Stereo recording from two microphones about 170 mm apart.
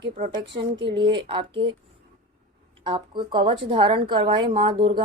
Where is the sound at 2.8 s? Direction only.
25° right (ahead or behind).